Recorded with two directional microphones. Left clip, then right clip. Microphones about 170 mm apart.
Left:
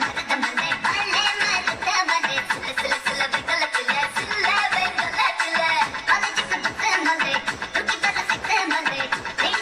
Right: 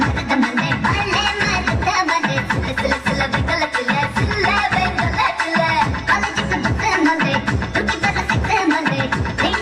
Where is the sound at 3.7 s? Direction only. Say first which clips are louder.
Right 3 dB; 10° right (ahead or behind).